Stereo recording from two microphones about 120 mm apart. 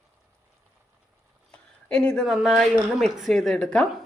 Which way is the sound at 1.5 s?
10° left (ahead or behind).